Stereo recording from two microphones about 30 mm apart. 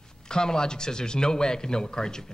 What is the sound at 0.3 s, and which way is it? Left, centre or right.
Speech, left.